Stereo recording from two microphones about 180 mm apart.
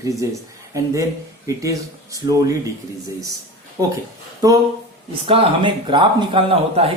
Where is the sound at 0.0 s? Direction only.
20° right (ahead or behind).